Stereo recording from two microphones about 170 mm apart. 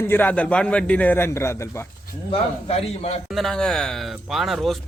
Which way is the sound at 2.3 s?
35° left (ahead or behind).